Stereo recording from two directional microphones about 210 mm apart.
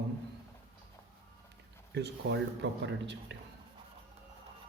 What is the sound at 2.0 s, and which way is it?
Speech, 55° right (ahead or behind).